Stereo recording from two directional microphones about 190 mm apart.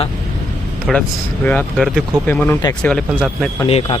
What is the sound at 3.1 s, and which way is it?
Speech, 5° right (ahead or behind).